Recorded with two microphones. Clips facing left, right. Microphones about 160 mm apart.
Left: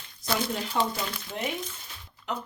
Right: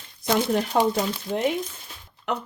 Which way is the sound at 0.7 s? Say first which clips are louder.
Right 6 dB; 60° right (ahead or behind).